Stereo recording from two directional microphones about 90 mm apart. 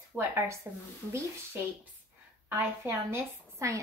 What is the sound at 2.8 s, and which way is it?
Speech, 30° right (ahead or behind).